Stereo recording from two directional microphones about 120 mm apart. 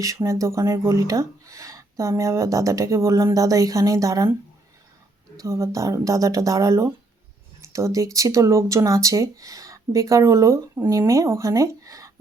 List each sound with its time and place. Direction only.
0.0 s speech: 25° right (ahead or behind)
5.4 s speech: 25° right (ahead or behind)